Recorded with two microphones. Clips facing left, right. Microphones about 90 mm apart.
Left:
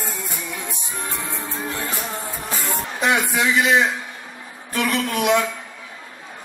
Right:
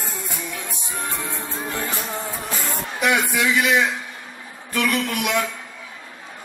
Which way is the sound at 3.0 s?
25° left (ahead or behind).